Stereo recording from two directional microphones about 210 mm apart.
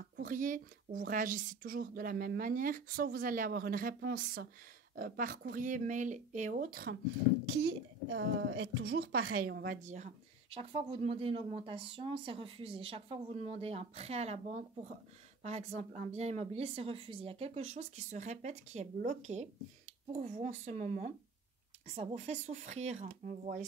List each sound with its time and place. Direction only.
0.0 s a woman's voice: 40° right (ahead or behind)
9.8 s a woman's voice: 35° right (ahead or behind)